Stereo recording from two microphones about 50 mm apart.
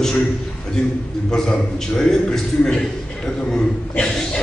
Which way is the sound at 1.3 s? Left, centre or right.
Centre.